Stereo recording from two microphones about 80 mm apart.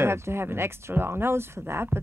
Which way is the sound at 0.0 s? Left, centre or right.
Right.